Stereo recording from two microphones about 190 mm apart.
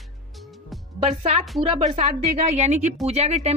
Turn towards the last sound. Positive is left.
turn(degrees=-35)  # may be behind; listen again after turning